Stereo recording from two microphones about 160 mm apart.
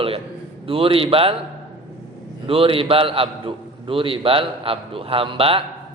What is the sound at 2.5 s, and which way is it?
A man's voice, 35° right (ahead or behind).